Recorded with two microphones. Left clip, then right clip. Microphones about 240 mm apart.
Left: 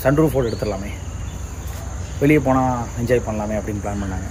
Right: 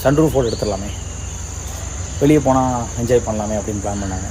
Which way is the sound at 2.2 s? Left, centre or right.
Centre.